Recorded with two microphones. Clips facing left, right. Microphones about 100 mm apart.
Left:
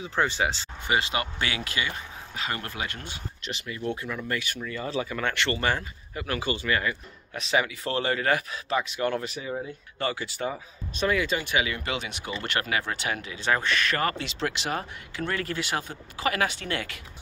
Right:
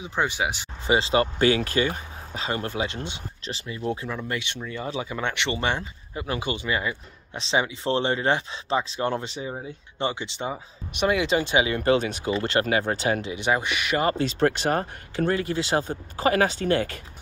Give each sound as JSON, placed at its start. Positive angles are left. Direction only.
{"t": 0.0, "sound": "speech", "side_deg": -15}
{"t": 0.8, "sound": "speech", "side_deg": -30}
{"t": 11.8, "sound": "speech", "side_deg": -40}
{"t": 12.3, "sound": "speech", "side_deg": -25}
{"t": 13.3, "sound": "speech", "side_deg": -15}
{"t": 14.1, "sound": "speech", "side_deg": -45}
{"t": 15.3, "sound": "speech", "side_deg": -25}